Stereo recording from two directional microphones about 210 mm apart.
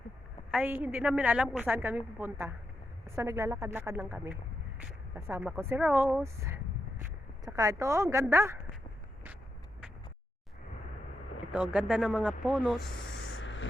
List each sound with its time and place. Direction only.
0.5 s a woman's voice: 5° right (ahead or behind)
11.5 s speech: 5° right (ahead or behind)
13.3 s spray: 60° left (ahead or behind)